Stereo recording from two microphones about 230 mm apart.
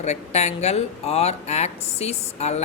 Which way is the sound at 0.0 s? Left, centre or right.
Left.